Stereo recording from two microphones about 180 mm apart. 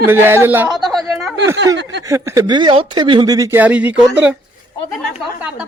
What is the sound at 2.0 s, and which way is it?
Speech, 15° right (ahead or behind).